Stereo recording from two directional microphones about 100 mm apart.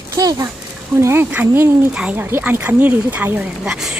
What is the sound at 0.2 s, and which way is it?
Speech, 40° right (ahead or behind).